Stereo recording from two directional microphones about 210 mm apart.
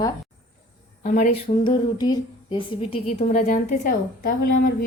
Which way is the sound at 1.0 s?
40° left (ahead or behind).